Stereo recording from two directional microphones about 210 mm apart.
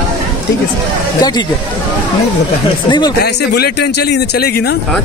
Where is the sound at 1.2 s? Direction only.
20° left (ahead or behind).